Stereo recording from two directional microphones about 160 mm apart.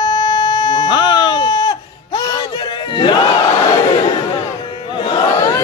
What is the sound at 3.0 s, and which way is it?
Battle cry, 30° left (ahead or behind).